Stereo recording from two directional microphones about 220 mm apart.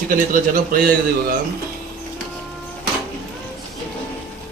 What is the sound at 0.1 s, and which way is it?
A man's voice, 40° right (ahead or behind).